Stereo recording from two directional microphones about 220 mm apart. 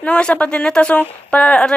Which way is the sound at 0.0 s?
5° left (ahead or behind).